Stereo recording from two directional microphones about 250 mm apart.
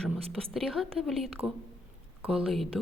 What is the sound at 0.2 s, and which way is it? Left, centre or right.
Speech, right.